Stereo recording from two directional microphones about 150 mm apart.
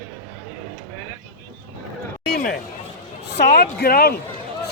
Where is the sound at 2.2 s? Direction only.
90° left.